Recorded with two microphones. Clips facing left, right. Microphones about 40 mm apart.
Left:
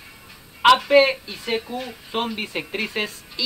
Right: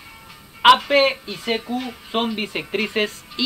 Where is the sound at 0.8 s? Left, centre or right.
Right.